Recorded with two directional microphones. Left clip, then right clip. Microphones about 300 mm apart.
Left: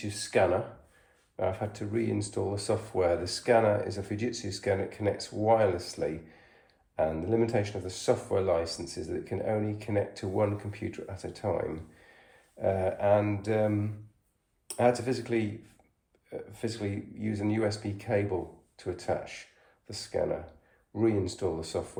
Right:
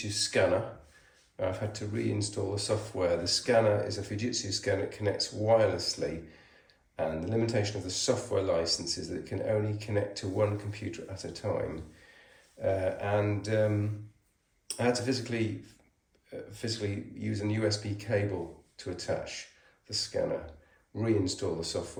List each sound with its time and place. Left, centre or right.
0.1 s speech: centre
6.9 s speech: centre
12.6 s speech: centre
14.7 s speech: centre